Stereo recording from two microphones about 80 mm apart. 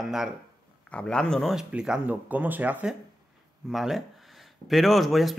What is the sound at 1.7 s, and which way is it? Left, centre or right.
Speech, centre.